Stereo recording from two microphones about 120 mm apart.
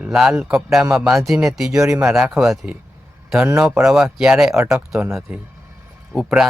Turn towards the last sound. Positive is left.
turn(degrees=-5)  # may be behind; listen again after turning